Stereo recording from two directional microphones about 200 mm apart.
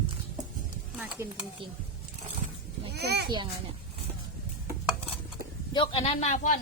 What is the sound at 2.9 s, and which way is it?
Speech, 55° right (ahead or behind).